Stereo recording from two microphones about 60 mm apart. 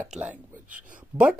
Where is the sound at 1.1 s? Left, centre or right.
Right.